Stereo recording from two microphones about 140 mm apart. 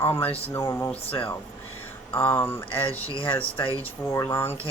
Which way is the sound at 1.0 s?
40° left (ahead or behind).